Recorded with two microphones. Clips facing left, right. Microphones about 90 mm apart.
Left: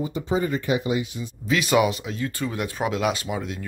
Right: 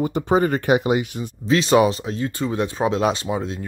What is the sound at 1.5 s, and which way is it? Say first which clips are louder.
Speech: right 4 dB; 35° right (ahead or behind).